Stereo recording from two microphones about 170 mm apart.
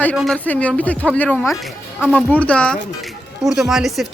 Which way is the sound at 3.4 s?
5° right (ahead or behind).